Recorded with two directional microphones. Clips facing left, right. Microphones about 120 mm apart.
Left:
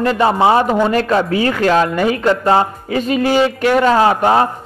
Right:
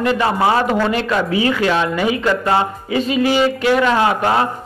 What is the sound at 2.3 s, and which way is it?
Speech, 30° left (ahead or behind).